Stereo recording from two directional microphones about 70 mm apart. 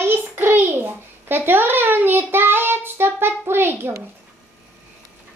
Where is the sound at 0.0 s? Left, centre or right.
Right.